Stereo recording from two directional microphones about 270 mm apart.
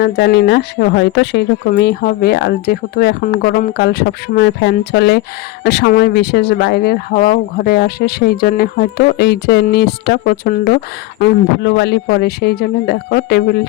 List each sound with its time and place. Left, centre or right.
0.0 s speech: left